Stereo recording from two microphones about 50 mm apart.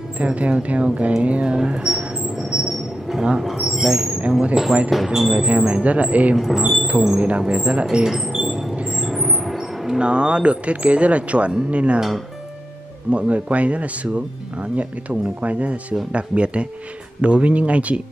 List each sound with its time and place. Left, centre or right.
0.2 s speech: right
2.3 s a sound: centre
3.3 s speech: centre
5.6 s speech: right
6.3 s speech: centre
7.2 s speech: right
7.8 s speech: centre
8.1 s a sound: centre
8.7 s train: right
9.4 s a sound: centre
9.9 s speech: right
13.1 s speech: right